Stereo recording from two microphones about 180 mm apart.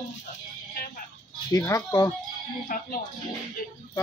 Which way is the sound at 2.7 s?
50° left (ahead or behind).